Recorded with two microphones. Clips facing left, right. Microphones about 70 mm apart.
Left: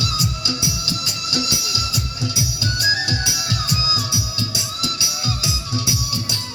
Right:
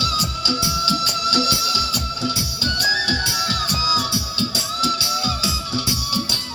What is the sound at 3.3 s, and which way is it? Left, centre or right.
Music, right.